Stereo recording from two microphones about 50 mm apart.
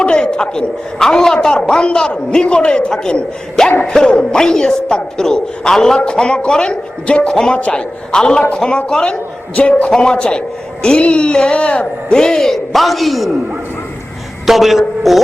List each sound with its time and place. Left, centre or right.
0.0 s a man's voice: centre
14.4 s a man's voice: centre